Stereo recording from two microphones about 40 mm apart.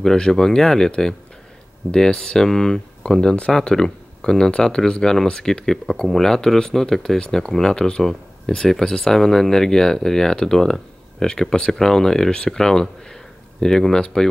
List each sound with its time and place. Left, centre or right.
0.0 s speech: centre